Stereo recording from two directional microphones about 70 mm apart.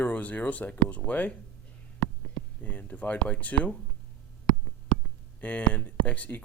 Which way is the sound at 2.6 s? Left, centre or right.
Left.